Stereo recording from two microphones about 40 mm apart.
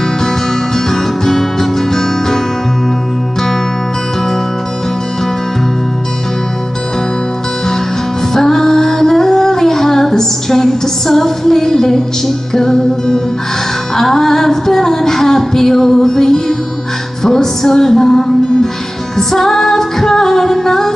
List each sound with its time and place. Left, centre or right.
0.7 s music: centre
8.3 s music: centre
12.5 s female singing: centre
17.2 s music: centre
19.1 s female singing: centre